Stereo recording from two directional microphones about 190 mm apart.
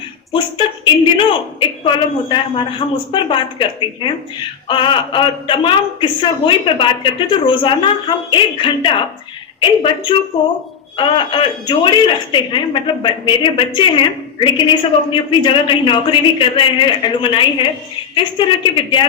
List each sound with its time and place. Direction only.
0.3 s a woman's voice: 25° left (ahead or behind)